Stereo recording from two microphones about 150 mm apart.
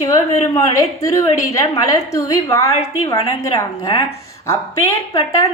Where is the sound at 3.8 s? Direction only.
40° left (ahead or behind).